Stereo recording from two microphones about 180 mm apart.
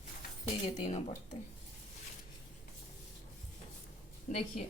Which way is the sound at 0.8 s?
35° left (ahead or behind).